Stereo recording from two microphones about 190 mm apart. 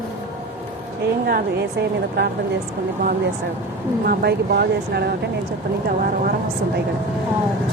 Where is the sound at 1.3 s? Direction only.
55° right (ahead or behind).